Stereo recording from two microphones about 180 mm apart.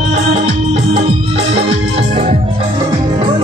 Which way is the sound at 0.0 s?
40° right (ahead or behind).